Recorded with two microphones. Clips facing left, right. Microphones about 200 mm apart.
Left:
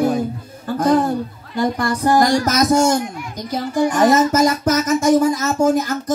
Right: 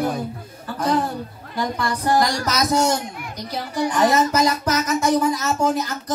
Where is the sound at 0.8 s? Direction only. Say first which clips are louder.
Left 6 dB; 50° left (ahead or behind).